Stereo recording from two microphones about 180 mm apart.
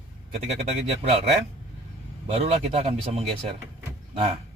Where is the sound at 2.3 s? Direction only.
35° right (ahead or behind).